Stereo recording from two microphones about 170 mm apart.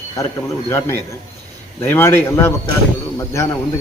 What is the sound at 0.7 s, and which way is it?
Speech, 15° left (ahead or behind).